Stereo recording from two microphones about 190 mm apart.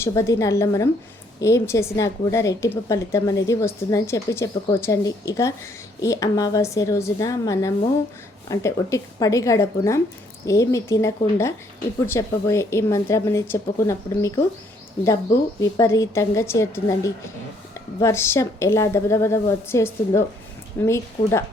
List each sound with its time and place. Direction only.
0.0 s a woman's voice: 15° left (ahead or behind)
15.6 s a woman's voice: 15° left (ahead or behind)